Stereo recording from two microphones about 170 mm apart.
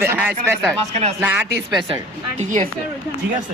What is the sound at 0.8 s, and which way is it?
Speech, 40° right (ahead or behind).